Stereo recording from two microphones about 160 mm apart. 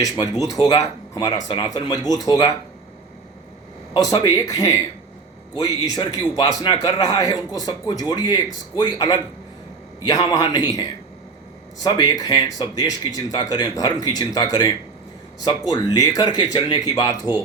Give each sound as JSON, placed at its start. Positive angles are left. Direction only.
{"t": 0.0, "sound": "speech", "side_deg": 20}
{"t": 3.9, "sound": "speech", "side_deg": 25}
{"t": 11.9, "sound": "speech", "side_deg": 25}